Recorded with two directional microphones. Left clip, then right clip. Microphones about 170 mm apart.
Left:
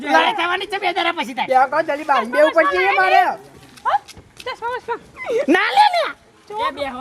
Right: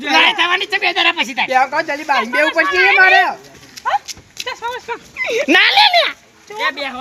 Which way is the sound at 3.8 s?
70° left (ahead or behind).